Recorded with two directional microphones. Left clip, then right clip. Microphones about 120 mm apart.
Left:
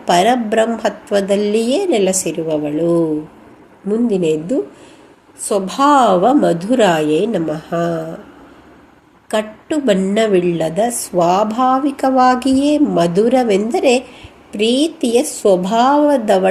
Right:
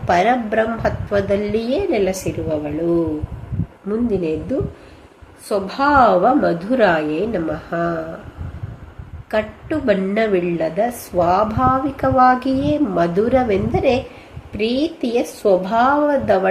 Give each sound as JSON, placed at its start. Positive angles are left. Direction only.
{"t": 0.0, "sound": "a woman's voice", "side_deg": 45}
{"t": 4.1, "sound": "a woman's voice", "side_deg": 45}
{"t": 9.3, "sound": "a woman's voice", "side_deg": 45}